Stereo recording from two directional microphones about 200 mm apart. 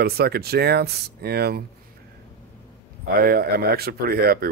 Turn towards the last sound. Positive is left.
turn(degrees=-50)  # may be behind; listen again after turning